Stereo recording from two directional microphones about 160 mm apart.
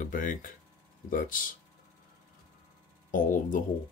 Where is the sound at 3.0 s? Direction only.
55° left (ahead or behind).